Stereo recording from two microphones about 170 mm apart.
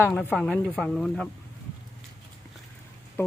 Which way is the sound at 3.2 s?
10° left (ahead or behind).